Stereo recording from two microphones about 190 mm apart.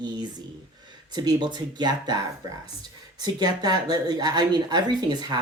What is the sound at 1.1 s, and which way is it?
Speech, 20° right (ahead or behind).